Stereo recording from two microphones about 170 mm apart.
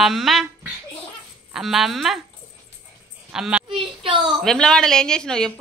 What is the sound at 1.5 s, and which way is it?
Speech, centre (ahead or behind).